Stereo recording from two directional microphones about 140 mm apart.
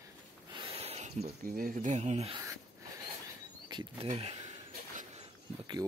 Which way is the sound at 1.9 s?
50° right (ahead or behind).